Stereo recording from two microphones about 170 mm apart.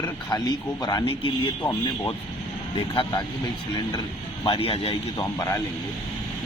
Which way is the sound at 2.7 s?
25° left (ahead or behind).